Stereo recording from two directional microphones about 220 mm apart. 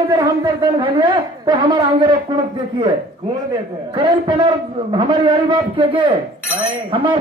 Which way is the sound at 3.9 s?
20° right (ahead or behind).